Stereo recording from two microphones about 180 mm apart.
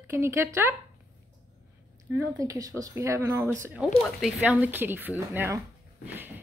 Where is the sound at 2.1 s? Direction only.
20° right (ahead or behind).